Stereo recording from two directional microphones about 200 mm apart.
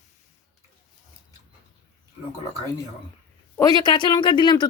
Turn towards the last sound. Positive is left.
turn(degrees=20)  # may be behind; listen again after turning